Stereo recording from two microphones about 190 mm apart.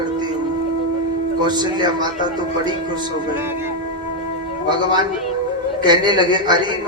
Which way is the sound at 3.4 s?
10° right (ahead or behind).